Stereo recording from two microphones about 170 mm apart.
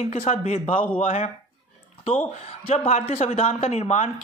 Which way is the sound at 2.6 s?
40° left (ahead or behind).